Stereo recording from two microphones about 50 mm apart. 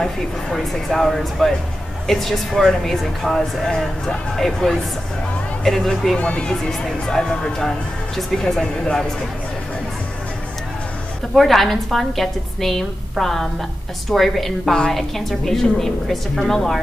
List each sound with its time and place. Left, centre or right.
0.0 s speech: centre
6.1 s a woman's voice: left; by 8.6 s centre
11.3 s a woman's voice: centre